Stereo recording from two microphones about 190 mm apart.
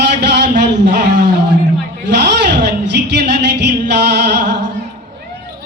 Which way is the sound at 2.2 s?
60° right (ahead or behind).